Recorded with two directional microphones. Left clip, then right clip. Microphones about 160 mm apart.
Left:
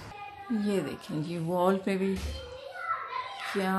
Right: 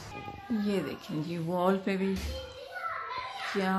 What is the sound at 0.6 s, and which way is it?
Speech, 10° left (ahead or behind).